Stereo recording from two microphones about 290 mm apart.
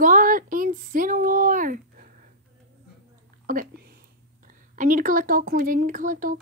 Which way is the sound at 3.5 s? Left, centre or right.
Right.